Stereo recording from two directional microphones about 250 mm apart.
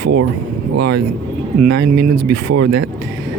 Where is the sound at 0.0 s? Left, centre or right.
Right.